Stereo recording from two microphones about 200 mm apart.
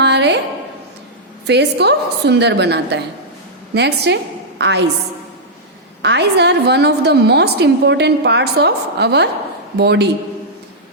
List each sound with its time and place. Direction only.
0.0 s a sound: 60° right (ahead or behind)
1.5 s a woman's voice: 55° right (ahead or behind)
6.0 s a woman's voice: 60° right (ahead or behind)